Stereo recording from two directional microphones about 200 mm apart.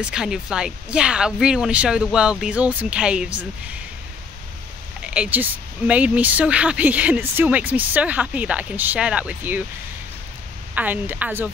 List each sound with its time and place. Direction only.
0.0 s speech: 5° right (ahead or behind)
5.0 s speech: 5° right (ahead or behind)
10.7 s speech: 10° right (ahead or behind)